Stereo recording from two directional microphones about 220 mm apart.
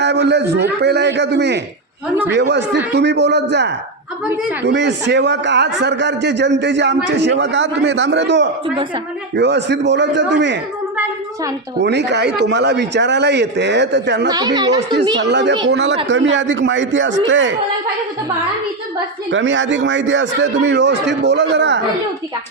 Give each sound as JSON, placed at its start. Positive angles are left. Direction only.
{"t": 0.0, "sound": "a man's voice", "side_deg": -50}
{"t": 11.8, "sound": "a man's voice", "side_deg": -50}
{"t": 14.3, "sound": "a woman's voice", "side_deg": -20}
{"t": 15.2, "sound": "a man's voice", "side_deg": -55}
{"t": 19.3, "sound": "a man's voice", "side_deg": -55}